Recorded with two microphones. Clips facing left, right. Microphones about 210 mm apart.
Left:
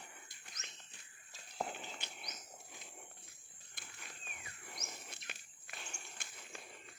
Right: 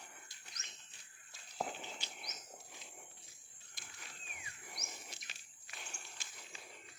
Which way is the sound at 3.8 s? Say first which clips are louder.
Left 1 dB; 60° left (ahead or behind).